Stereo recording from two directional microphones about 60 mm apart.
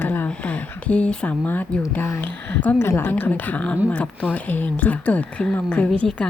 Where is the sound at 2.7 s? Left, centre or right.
Left.